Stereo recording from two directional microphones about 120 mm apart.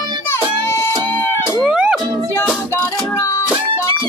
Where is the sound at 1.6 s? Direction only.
5° right (ahead or behind).